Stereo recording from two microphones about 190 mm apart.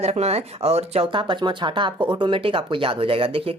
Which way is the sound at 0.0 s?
35° right (ahead or behind).